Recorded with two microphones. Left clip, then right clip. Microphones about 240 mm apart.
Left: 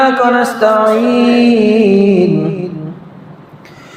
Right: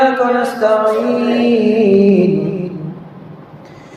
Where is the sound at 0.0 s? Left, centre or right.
Left.